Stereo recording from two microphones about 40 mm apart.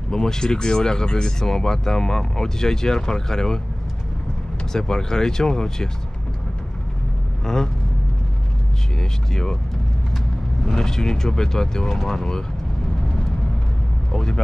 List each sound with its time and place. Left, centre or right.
0.1 s speech: centre
4.7 s speech: centre
7.4 s speech: centre
9.3 s speech: centre
10.7 s speech: centre
14.1 s speech: centre